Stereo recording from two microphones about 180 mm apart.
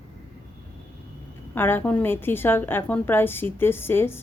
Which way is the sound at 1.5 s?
10° left (ahead or behind).